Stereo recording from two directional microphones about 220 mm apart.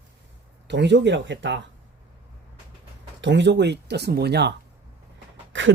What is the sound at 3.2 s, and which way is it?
Speech, 55° right (ahead or behind).